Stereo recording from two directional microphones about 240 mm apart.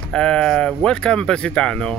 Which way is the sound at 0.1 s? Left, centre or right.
Centre.